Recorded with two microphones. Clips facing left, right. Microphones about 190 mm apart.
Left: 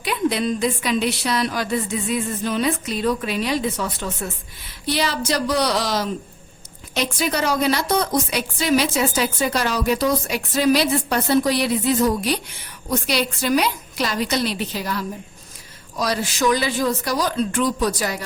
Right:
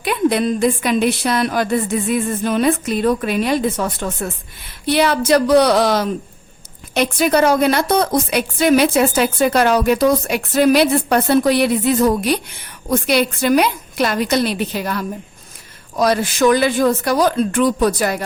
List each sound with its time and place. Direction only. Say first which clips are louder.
0.0 s a woman's voice: right 5 dB; 55° right (ahead or behind)